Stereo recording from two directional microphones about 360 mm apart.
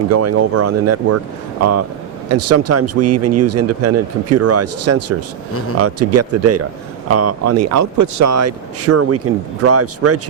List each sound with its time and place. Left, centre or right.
0.1 s speech: right
2.3 s speech: right